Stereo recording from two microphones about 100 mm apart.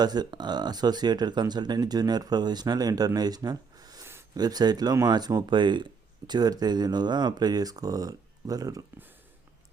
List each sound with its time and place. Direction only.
0.0 s speech: 45° right (ahead or behind)